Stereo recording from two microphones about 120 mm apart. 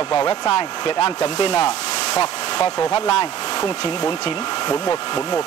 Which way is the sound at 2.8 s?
60° left (ahead or behind).